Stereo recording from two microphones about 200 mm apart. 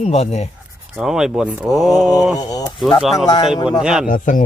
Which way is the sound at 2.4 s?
15° left (ahead or behind).